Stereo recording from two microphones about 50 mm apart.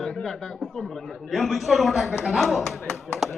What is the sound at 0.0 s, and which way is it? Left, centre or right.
A man's voice, centre.